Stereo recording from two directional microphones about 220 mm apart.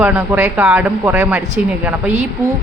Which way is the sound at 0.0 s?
10° right (ahead or behind).